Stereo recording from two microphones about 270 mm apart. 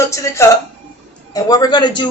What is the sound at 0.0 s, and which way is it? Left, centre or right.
A man's voice, centre.